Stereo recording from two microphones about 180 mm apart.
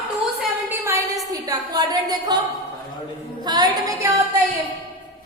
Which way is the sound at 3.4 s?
20° right (ahead or behind).